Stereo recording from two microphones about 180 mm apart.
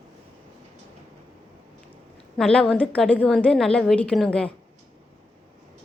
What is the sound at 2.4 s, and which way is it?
A woman's voice, 5° left (ahead or behind).